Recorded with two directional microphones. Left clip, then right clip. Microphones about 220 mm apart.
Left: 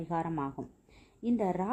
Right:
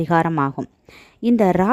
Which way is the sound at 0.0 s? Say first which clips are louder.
Right 16 dB; 50° right (ahead or behind).